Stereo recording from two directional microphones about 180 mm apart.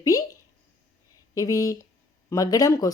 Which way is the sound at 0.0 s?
20° left (ahead or behind).